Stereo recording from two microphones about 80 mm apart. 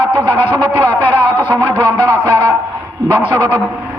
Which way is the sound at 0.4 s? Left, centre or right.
Left.